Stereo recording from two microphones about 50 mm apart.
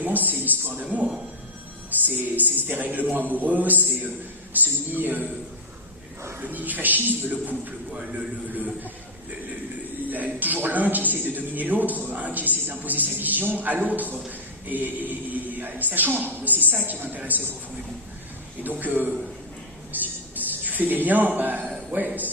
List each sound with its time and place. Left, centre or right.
0.0 s a man's voice: right
6.4 s a man's voice: right
10.1 s a man's voice: right
18.6 s a man's voice: right
19.9 s a sound: right
20.7 s a man's voice: right